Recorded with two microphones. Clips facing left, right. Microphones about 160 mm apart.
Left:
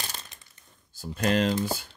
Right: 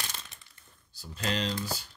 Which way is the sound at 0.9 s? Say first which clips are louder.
Left 8 dB; 50° left (ahead or behind).